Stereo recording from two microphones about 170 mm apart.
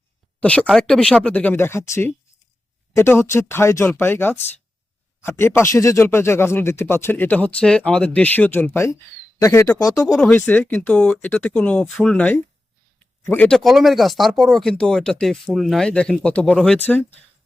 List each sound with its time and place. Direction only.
0.3 s speech: 10° left (ahead or behind)
10.2 s speech: 5° left (ahead or behind)